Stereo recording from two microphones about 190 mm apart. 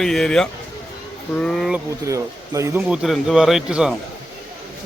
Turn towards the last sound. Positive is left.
turn(degrees=0)  # may be behind; listen again after turning